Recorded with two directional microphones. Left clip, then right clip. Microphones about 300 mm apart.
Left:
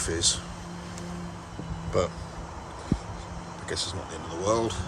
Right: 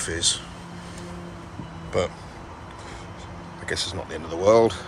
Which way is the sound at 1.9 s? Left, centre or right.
Centre.